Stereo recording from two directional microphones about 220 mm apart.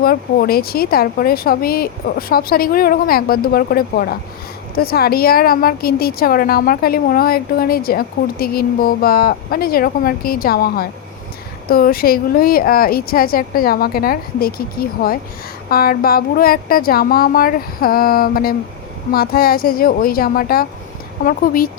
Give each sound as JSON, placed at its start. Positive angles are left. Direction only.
{"t": 0.0, "sound": "a woman's voice", "side_deg": 45}